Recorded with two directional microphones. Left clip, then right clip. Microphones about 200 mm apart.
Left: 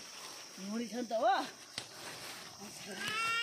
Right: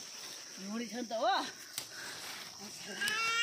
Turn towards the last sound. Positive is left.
turn(degrees=50)  # may be behind; listen again after turning